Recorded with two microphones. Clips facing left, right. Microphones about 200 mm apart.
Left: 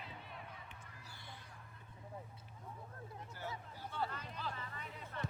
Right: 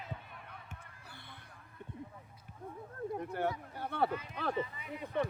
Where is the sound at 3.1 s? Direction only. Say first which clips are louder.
Right 13 dB; 60° right (ahead or behind).